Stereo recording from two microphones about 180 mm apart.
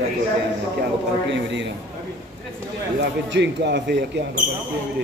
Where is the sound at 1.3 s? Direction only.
90° right.